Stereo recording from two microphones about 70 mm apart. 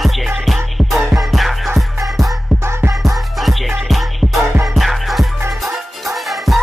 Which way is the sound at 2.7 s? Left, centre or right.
Right.